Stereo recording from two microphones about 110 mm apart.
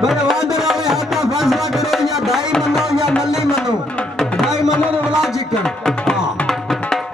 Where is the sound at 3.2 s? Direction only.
5° right (ahead or behind).